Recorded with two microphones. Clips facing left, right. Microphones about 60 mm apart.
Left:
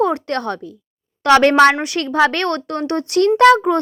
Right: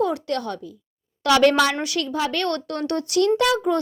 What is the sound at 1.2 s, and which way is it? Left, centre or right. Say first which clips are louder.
Speech: left 6 dB; left.